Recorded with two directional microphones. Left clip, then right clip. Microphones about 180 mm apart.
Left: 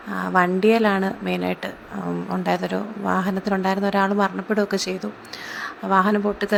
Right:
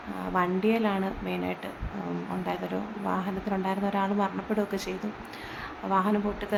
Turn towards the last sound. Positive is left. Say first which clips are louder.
# left 8 dB
turn(degrees=30)  # may be behind; listen again after turning